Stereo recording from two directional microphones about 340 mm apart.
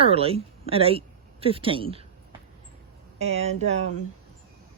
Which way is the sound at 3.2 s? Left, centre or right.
Centre.